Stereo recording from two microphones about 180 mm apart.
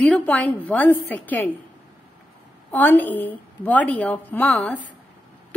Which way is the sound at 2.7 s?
10° left (ahead or behind).